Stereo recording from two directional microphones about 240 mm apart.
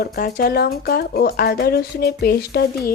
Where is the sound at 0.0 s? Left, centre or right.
Left.